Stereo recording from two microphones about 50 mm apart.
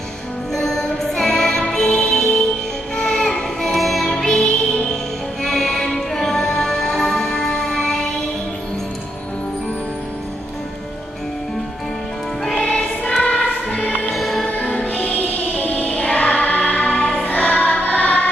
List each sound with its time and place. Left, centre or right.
0.5 s music: centre
3.7 s music: centre
12.5 s music: left
14.1 s music: centre
14.6 s music: left
14.9 s music: left